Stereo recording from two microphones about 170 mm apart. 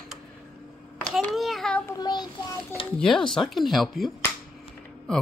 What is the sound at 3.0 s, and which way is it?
Speech, 5° left (ahead or behind).